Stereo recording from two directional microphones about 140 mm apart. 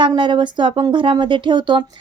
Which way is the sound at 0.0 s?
35° right (ahead or behind).